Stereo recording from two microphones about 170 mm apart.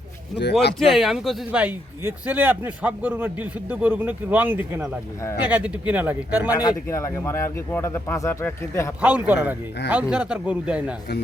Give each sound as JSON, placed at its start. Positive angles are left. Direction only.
{"t": 0.8, "sound": "a man's voice", "side_deg": 0}
{"t": 6.5, "sound": "a man's voice", "side_deg": 20}
{"t": 9.0, "sound": "a man's voice", "side_deg": -10}